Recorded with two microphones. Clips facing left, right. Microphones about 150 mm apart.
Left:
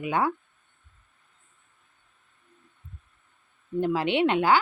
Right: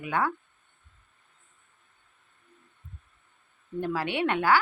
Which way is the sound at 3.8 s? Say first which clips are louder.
Left 5 dB; 20° left (ahead or behind).